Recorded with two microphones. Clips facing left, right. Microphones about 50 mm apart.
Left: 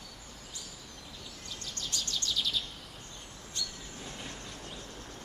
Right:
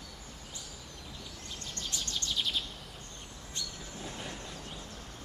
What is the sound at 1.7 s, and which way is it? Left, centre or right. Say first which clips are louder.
Bird vocalization: left 1 dB; right.